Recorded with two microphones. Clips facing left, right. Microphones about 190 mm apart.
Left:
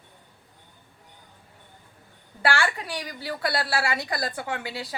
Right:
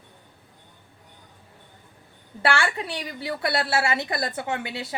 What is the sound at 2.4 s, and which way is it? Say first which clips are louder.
A woman's voice: right 1 dB; 25° right (ahead or behind).